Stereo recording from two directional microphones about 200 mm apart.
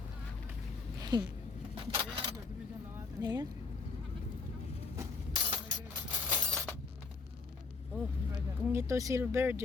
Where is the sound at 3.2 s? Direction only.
20° right (ahead or behind).